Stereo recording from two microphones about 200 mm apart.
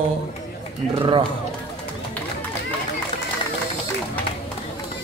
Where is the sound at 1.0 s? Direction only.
25° right (ahead or behind).